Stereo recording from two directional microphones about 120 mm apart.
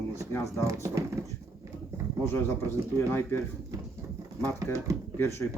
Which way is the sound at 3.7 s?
30° right (ahead or behind).